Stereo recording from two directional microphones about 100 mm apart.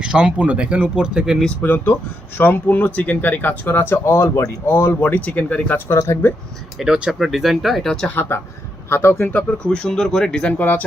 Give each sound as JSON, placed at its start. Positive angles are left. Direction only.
{"t": 0.0, "sound": "speech", "side_deg": -10}
{"t": 1.5, "sound": "speech", "side_deg": 20}
{"t": 6.7, "sound": "speech", "side_deg": -5}
{"t": 8.0, "sound": "speech", "side_deg": 20}
{"t": 10.6, "sound": "speech", "side_deg": 15}